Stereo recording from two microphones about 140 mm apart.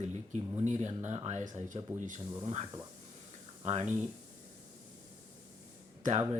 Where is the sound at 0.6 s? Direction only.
55° right (ahead or behind).